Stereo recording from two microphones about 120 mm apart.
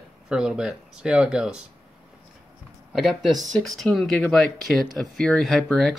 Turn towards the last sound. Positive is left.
turn(degrees=0)  # may be behind; listen again after turning